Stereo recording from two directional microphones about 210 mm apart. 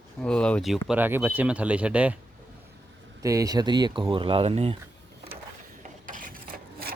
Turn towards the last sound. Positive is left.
turn(degrees=-45)  # may be behind; listen again after turning